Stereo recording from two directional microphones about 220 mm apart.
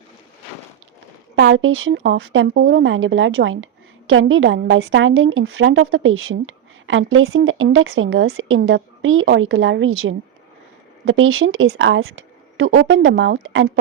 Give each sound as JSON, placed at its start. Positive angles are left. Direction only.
{"t": 1.4, "sound": "a woman's voice", "side_deg": -60}
{"t": 2.5, "sound": "a woman's voice", "side_deg": -50}